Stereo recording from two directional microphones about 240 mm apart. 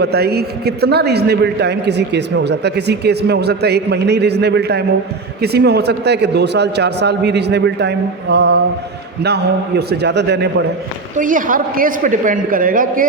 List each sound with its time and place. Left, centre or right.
0.0 s a man's voice: right
11.2 s a woman's voice: right